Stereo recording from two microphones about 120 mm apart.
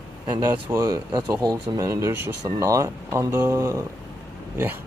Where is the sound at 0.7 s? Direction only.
30° right (ahead or behind).